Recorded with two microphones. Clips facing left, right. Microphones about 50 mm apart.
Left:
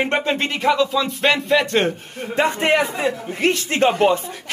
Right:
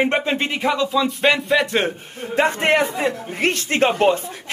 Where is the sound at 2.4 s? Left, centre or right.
Right.